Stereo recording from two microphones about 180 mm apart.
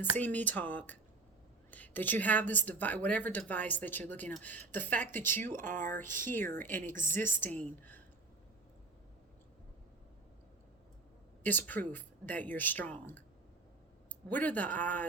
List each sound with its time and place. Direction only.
0.2 s a woman's voice: 10° left (ahead or behind)
5.6 s speech: 45° right (ahead or behind)
6.1 s a woman's voice: 10° left (ahead or behind)
11.4 s a woman's voice: 10° left (ahead or behind)
14.3 s a woman's voice: 10° left (ahead or behind)